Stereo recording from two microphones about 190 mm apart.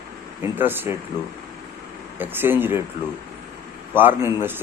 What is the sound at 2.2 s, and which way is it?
Speech, 10° right (ahead or behind).